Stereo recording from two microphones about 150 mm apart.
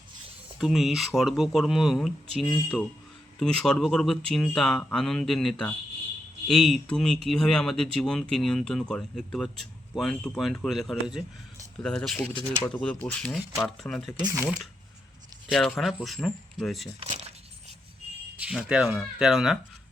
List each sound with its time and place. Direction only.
0.6 s speech: centre (ahead or behind)
2.5 s speech: 10° left (ahead or behind)
15.4 s speech: centre (ahead or behind)
17.0 s speech: 40° right (ahead or behind)
18.3 s speech: 5° right (ahead or behind)